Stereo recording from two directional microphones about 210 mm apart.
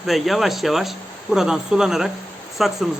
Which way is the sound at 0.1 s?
Centre (ahead or behind).